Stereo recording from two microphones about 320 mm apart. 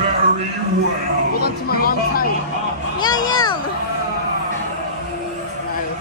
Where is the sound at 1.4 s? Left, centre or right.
Left.